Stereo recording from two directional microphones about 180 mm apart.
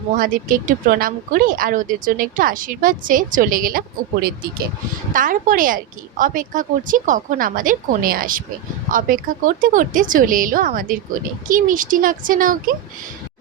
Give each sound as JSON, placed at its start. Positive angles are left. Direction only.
{"t": 0.2, "sound": "speech", "side_deg": -50}